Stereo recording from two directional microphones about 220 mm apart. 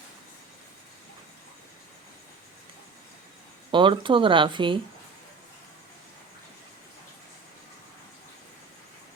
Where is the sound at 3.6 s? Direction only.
20° right (ahead or behind).